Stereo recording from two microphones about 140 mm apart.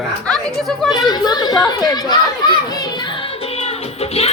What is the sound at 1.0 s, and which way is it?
Speech, 30° left (ahead or behind).